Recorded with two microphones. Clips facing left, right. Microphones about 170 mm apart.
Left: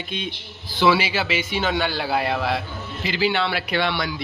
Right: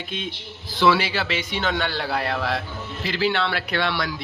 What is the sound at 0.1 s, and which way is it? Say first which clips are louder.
A man's voice: left 1 dB; centre (ahead or behind).